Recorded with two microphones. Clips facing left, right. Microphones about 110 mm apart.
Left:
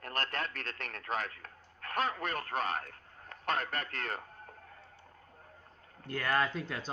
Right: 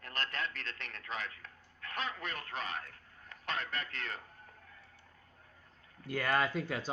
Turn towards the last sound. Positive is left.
turn(degrees=-5)  # may be behind; listen again after turning